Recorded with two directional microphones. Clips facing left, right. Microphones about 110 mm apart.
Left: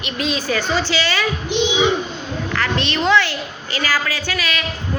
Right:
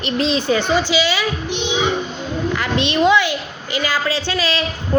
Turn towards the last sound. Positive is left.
turn(degrees=-30)  # may be behind; listen again after turning